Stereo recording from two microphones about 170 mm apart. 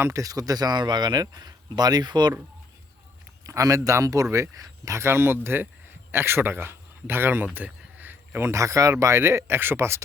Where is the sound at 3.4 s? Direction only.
20° right (ahead or behind).